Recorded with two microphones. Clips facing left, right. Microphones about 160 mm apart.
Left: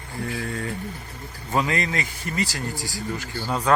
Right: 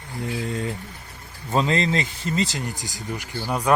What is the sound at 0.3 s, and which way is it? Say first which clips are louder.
Speech: right 3 dB; 20° right (ahead or behind).